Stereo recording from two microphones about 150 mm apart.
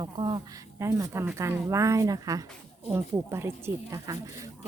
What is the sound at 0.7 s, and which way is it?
A woman's voice, 20° right (ahead or behind).